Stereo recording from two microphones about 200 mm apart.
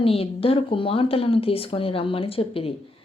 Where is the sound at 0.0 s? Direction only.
30° left (ahead or behind).